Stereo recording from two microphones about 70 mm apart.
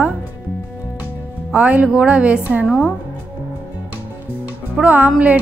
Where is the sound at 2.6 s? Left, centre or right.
Centre.